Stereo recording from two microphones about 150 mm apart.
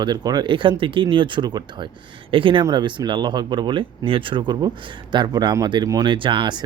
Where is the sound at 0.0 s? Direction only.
25° right (ahead or behind).